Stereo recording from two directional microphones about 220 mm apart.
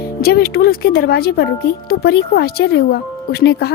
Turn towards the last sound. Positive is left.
turn(degrees=45)  # may be behind; listen again after turning